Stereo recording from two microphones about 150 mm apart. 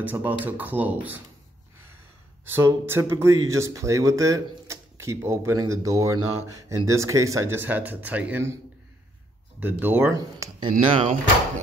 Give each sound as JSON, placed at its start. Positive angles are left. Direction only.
{"t": 0.0, "sound": "speech", "side_deg": -10}
{"t": 2.4, "sound": "speech", "side_deg": -15}
{"t": 9.6, "sound": "speech", "side_deg": -15}
{"t": 10.1, "sound": "speech", "side_deg": -25}
{"t": 11.0, "sound": "speech", "side_deg": -55}